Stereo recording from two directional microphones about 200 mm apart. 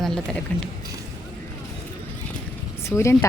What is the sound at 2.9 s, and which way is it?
Speech, 15° left (ahead or behind).